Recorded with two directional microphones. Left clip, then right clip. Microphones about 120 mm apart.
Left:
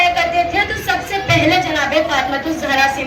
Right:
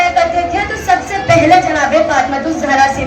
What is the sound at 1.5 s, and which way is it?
A woman's voice, 30° right (ahead or behind).